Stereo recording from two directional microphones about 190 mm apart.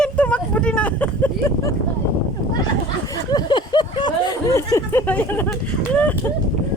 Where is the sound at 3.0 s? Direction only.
20° left (ahead or behind).